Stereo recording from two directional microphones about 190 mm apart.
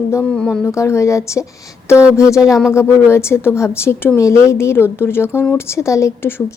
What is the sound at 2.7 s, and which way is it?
Speech, 15° left (ahead or behind).